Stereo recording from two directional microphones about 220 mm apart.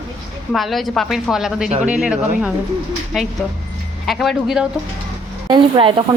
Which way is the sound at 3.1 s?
Centre (ahead or behind).